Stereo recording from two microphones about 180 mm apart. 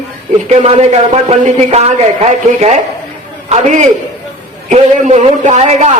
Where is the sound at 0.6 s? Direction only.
35° right (ahead or behind).